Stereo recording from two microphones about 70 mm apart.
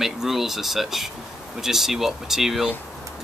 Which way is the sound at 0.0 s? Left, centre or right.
Centre.